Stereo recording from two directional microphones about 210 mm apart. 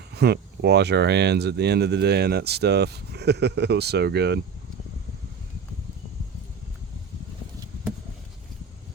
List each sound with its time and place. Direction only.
0.1 s speech: 50° right (ahead or behind)